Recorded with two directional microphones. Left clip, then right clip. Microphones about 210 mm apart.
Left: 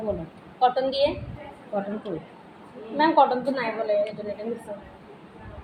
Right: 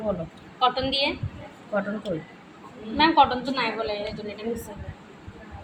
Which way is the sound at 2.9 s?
25° right (ahead or behind).